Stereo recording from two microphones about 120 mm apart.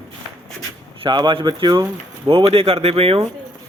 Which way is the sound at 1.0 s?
40° right (ahead or behind).